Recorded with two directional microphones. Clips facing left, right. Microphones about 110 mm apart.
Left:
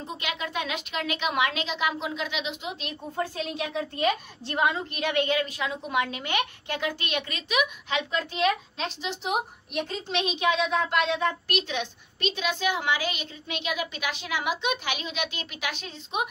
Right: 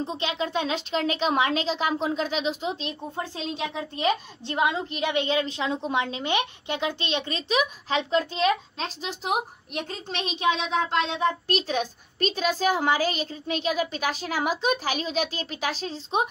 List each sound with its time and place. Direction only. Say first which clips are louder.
0.0 s a child's voice: right 5 dB; 30° right (ahead or behind)